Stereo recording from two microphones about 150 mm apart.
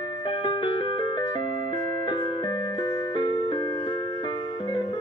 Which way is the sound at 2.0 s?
35° left (ahead or behind).